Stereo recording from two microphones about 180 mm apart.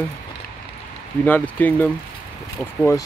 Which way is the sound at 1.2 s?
10° left (ahead or behind).